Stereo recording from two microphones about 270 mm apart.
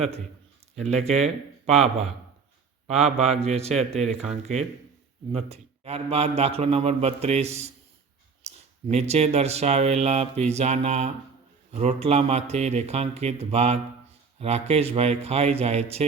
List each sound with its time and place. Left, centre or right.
0.8 s speech: right